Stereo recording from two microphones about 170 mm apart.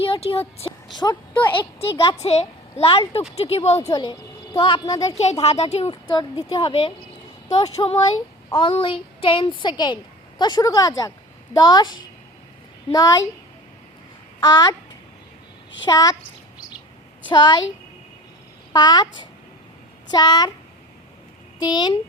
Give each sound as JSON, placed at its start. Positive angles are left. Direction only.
{"t": 0.0, "sound": "a woman's voice", "side_deg": 35}
{"t": 1.8, "sound": "a woman's voice", "side_deg": 35}
{"t": 3.8, "sound": "a woman's voice", "side_deg": 20}
{"t": 5.1, "sound": "a woman's voice", "side_deg": 40}
{"t": 5.9, "sound": "a woman's voice", "side_deg": 25}
{"t": 14.4, "sound": "a woman's voice", "side_deg": 20}
{"t": 15.9, "sound": "a woman's voice", "side_deg": 20}
{"t": 17.2, "sound": "a woman's voice", "side_deg": 25}
{"t": 18.7, "sound": "a woman's voice", "side_deg": 25}
{"t": 21.6, "sound": "a woman's voice", "side_deg": 25}